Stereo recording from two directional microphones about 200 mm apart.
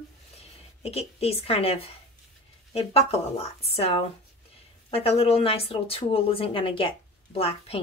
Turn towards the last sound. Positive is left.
turn(degrees=30)  # may be behind; listen again after turning